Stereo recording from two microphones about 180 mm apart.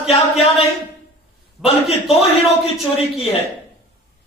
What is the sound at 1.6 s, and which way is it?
A man's voice, 35° left (ahead or behind).